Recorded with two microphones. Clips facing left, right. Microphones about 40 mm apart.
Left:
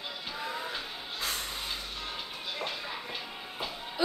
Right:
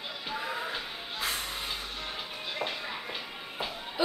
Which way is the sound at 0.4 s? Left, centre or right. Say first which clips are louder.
Right 1 dB; centre.